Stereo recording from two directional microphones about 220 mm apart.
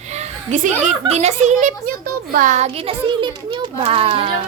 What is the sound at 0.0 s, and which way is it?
Speech, 30° right (ahead or behind).